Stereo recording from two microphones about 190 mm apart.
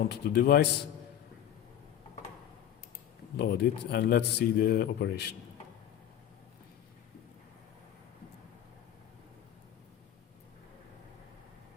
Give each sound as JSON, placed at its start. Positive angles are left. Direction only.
{"t": 0.1, "sound": "a man's voice", "side_deg": 60}
{"t": 3.3, "sound": "a man's voice", "side_deg": 60}